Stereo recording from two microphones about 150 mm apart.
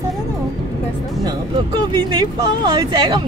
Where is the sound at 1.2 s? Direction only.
30° right (ahead or behind).